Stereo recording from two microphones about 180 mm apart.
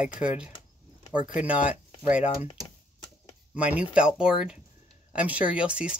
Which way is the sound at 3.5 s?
5° right (ahead or behind).